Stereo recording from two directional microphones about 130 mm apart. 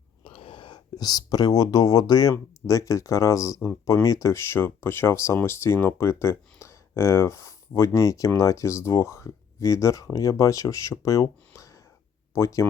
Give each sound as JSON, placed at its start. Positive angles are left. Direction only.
{"t": 0.3, "sound": "speech", "side_deg": 45}